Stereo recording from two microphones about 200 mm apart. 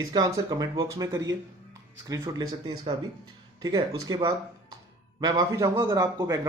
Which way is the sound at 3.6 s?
15° right (ahead or behind).